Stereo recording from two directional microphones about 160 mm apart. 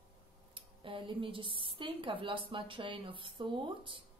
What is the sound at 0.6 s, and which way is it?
Speech, 30° right (ahead or behind).